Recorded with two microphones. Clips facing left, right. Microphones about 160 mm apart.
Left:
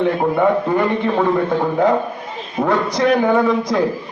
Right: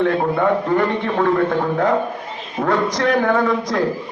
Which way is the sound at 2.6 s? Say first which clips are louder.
Left 2 dB; 10° left (ahead or behind).